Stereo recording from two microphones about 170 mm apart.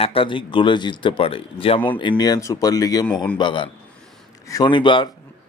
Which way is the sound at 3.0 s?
5° left (ahead or behind).